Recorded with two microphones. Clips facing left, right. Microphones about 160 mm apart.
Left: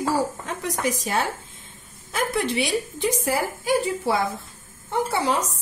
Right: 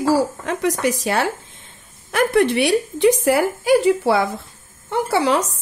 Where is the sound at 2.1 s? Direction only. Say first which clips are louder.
Right 8 dB; 65° right (ahead or behind); by 5.4 s 80° right.